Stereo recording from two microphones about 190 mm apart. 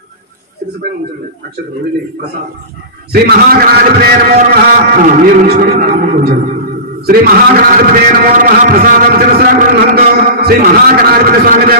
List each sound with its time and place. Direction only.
3.1 s a man's voice: 55° right (ahead or behind)